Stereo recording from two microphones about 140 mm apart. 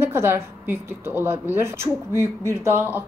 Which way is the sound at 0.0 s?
15° right (ahead or behind).